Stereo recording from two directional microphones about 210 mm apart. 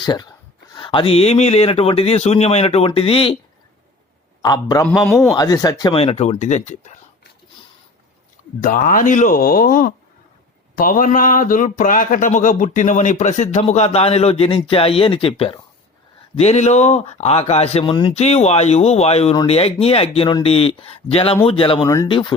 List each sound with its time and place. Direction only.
0.0 s speech: 20° left (ahead or behind)
4.4 s a man's voice: 20° left (ahead or behind)
4.9 s a man's voice: 5° left (ahead or behind)
5.3 s speech: 20° left (ahead or behind); by 6.9 s 35° left (ahead or behind)
8.6 s speech: 40° left (ahead or behind); by 22.4 s 25° left (ahead or behind)